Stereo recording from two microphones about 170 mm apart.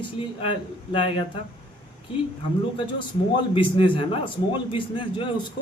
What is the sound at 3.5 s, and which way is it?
A man's voice, 30° left (ahead or behind).